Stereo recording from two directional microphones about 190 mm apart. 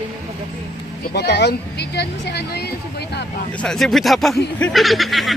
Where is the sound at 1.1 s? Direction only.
60° left (ahead or behind).